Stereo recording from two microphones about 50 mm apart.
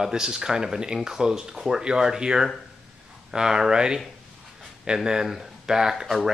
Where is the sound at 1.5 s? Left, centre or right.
Centre.